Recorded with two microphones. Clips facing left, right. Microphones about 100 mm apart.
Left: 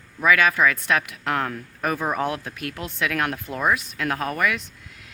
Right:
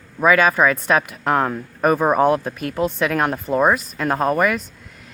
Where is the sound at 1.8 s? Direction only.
45° right (ahead or behind).